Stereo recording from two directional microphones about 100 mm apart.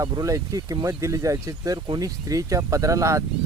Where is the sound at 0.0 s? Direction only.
40° right (ahead or behind).